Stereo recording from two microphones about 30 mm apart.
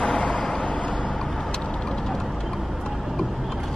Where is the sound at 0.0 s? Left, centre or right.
Left.